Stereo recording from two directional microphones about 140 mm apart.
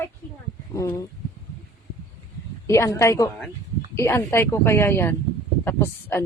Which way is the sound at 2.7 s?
20° left (ahead or behind).